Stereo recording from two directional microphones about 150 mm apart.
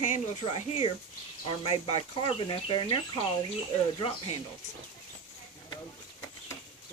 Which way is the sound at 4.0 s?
40° left (ahead or behind).